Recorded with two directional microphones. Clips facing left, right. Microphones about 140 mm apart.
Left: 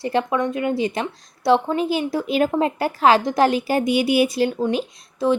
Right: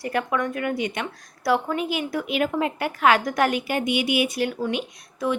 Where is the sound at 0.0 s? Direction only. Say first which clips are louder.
Left 4 dB; 25° left (ahead or behind).